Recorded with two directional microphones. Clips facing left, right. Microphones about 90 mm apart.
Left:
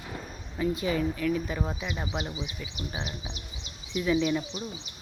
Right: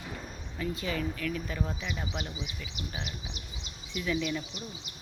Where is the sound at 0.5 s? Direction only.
20° left (ahead or behind).